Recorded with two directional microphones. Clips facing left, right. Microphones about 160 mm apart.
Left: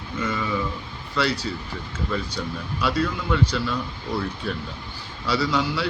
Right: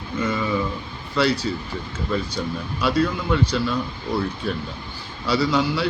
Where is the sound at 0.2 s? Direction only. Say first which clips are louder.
Right 3 dB; 25° right (ahead or behind).